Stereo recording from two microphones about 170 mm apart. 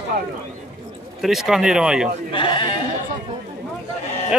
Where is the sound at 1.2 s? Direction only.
Centre (ahead or behind).